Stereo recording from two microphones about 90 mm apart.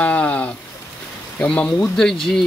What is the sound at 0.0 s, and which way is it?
Rain on surface, 15° left (ahead or behind).